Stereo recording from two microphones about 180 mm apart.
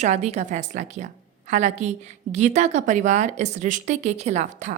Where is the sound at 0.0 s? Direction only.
40° right (ahead or behind).